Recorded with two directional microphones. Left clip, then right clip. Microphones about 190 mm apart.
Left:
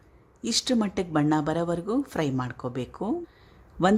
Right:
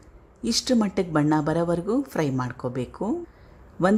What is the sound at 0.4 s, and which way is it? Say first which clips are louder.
A woman's voice: right 2 dB; centre (ahead or behind).